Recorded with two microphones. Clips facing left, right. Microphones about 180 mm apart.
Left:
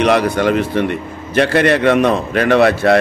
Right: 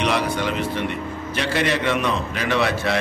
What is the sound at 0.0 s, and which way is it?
A man's voice, 55° left (ahead or behind).